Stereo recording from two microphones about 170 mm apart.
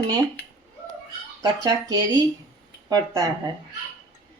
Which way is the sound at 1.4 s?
20° right (ahead or behind).